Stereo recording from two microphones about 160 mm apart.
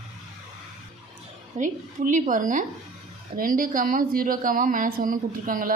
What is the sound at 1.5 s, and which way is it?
A woman's voice, 50° right (ahead or behind).